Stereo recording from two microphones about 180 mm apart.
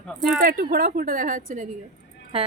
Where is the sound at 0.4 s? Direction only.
55° right (ahead or behind).